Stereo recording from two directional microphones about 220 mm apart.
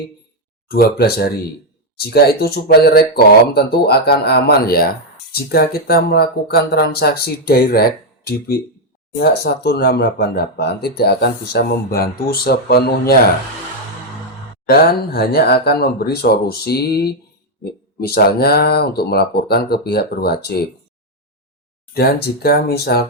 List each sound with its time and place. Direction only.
0.7 s speech: 45° left (ahead or behind)
14.7 s speech: 45° left (ahead or behind)
21.9 s speech: 45° left (ahead or behind)